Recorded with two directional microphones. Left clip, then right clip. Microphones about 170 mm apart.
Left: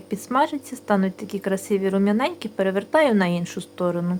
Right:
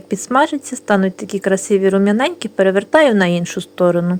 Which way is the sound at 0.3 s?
30° right (ahead or behind).